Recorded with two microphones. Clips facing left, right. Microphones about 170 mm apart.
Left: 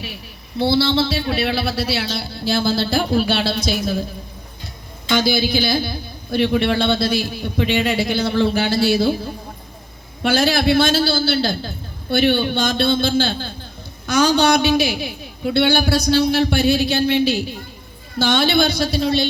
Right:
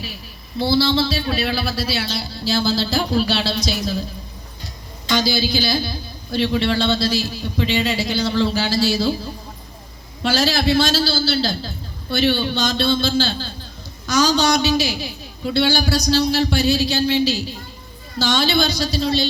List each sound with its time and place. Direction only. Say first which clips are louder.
0.0 s a man's voice: left 1 dB; 60° left (ahead or behind)
5.0 s a man's voice: left 2 dB; 55° left (ahead or behind)